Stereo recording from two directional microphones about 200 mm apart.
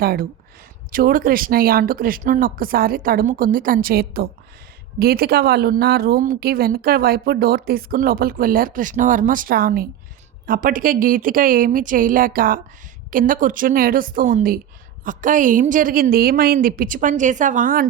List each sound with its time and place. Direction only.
0.0 s a woman's voice: 50° right (ahead or behind)